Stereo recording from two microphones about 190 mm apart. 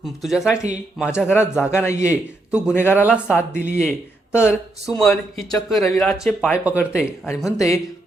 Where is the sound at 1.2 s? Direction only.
10° left (ahead or behind).